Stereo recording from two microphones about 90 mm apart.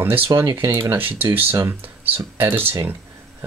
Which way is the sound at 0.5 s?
65° right (ahead or behind).